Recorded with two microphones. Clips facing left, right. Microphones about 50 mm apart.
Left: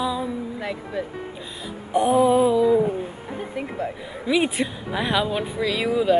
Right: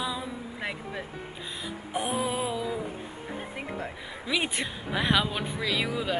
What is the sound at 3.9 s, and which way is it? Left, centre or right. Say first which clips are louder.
Speech: left 7 dB; centre.